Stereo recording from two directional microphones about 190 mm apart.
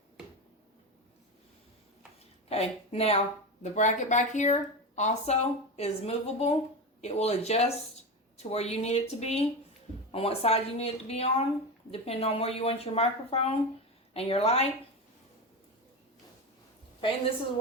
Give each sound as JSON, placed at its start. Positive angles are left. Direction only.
{"t": 2.5, "sound": "a woman's voice", "side_deg": 35}